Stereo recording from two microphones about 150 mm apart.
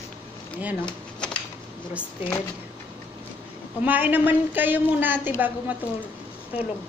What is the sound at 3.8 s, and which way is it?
A woman's voice, 10° right (ahead or behind).